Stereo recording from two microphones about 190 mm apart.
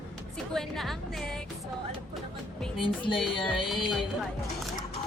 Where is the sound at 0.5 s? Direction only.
Centre (ahead or behind).